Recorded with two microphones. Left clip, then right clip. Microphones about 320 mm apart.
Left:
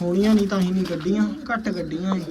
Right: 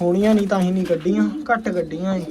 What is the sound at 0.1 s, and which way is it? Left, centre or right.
Speech, centre.